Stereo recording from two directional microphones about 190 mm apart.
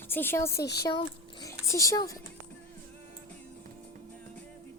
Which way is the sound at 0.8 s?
20° left (ahead or behind).